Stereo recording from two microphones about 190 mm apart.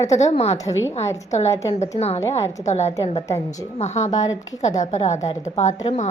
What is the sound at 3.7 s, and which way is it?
Speech, 35° left (ahead or behind).